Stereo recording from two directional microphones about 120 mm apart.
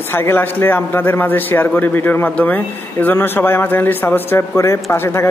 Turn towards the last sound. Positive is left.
turn(degrees=20)  # may be behind; listen again after turning